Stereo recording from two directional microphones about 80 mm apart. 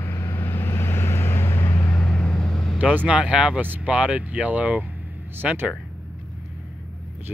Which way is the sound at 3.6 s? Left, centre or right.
Right.